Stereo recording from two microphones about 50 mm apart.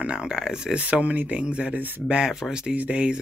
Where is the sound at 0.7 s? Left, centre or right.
Right.